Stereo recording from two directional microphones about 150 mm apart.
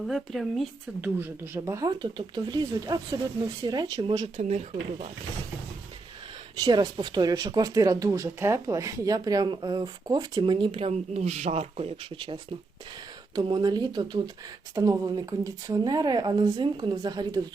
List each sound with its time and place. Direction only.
0.0 s speech: centre (ahead or behind)
1.0 s speech: 15° right (ahead or behind)
4.4 s speech: 50° right (ahead or behind)
6.7 s speech: 30° right (ahead or behind)
13.3 s speech: 25° right (ahead or behind)